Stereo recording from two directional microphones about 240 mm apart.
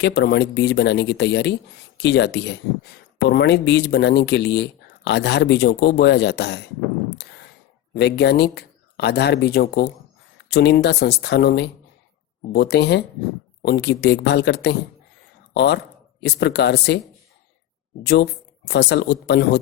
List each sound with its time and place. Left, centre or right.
0.0 s speech: left
7.9 s speech: left
18.0 s speech: left